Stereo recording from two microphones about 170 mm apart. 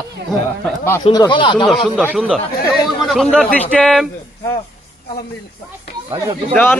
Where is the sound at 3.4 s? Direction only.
10° left (ahead or behind).